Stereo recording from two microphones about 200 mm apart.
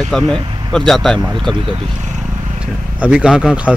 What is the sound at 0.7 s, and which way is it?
Speech, centre (ahead or behind).